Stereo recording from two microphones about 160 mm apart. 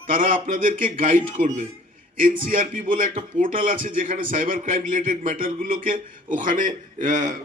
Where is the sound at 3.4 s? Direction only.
55° right (ahead or behind).